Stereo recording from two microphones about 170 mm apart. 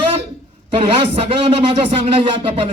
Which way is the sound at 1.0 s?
35° right (ahead or behind).